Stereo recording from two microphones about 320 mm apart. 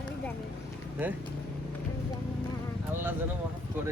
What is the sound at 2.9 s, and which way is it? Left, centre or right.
Speech, centre.